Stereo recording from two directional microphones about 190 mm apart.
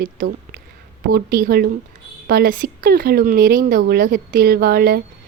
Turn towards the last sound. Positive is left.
turn(degrees=-55)  # may be behind; listen again after turning